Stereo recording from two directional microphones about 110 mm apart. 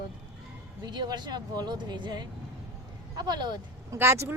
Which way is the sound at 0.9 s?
40° right (ahead or behind).